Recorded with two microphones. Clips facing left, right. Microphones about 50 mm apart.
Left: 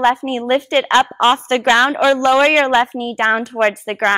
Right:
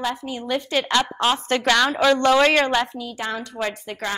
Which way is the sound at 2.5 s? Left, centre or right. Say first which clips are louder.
Left 6 dB; left.